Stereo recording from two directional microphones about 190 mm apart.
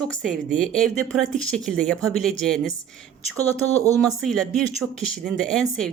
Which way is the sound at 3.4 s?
15° right (ahead or behind).